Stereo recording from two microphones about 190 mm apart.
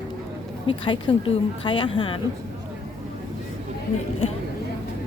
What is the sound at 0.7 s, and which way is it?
A woman's voice, 25° left (ahead or behind).